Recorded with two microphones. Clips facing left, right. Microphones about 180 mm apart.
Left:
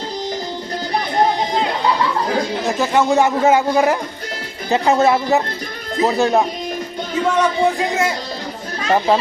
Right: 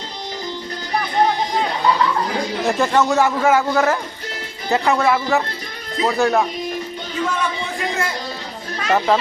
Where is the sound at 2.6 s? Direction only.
5° left (ahead or behind); by 6.4 s 20° left (ahead or behind).